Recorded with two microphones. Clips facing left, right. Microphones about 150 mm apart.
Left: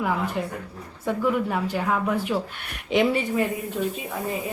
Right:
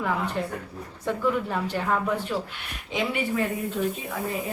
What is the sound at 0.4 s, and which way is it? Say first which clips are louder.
A woman's voice: even; 5° left (ahead or behind).